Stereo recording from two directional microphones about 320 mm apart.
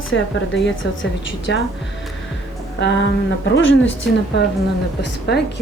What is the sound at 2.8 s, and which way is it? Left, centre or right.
Speech, left.